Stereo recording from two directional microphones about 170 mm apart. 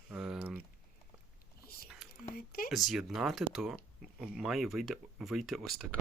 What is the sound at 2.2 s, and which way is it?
Speech, 60° left (ahead or behind).